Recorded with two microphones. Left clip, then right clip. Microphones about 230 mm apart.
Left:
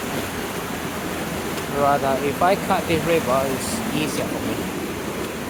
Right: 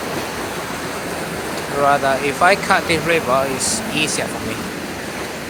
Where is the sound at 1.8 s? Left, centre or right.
Centre.